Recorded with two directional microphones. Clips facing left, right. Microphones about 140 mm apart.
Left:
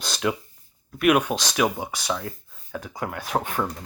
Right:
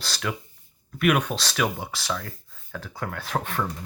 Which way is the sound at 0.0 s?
20° left (ahead or behind).